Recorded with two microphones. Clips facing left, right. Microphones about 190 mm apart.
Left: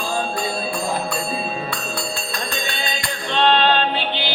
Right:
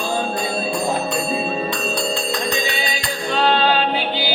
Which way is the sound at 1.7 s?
20° right (ahead or behind).